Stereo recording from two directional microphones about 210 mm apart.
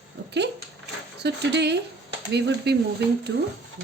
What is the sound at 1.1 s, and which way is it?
A woman's voice, 55° right (ahead or behind).